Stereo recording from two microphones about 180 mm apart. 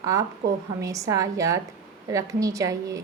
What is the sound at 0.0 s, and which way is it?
A woman's voice, 20° right (ahead or behind).